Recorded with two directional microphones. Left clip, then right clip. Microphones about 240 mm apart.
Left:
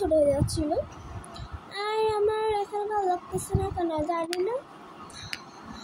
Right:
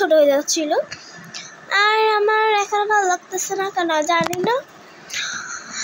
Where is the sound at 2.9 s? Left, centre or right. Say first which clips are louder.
Right 8 dB; right.